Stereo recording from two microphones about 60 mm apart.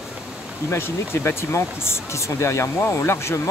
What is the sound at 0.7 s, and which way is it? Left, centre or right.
Speech, left.